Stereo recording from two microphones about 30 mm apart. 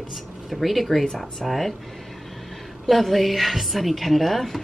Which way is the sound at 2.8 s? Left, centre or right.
Centre.